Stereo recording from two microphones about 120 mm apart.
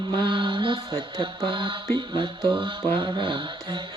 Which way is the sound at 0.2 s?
40° right (ahead or behind).